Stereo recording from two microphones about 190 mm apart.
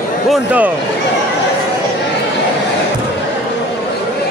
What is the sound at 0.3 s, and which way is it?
Speech, 5° right (ahead or behind).